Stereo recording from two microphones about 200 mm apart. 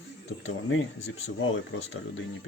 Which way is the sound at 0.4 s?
75° left (ahead or behind).